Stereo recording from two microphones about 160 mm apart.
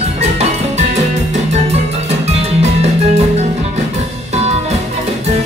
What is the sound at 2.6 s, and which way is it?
Music, 45° right (ahead or behind).